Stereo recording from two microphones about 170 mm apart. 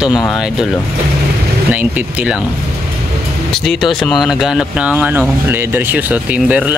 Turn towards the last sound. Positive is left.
turn(degrees=-10)  # may be behind; listen again after turning